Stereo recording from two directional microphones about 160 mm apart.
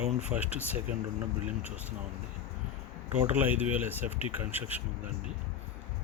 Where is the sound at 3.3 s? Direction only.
10° right (ahead or behind).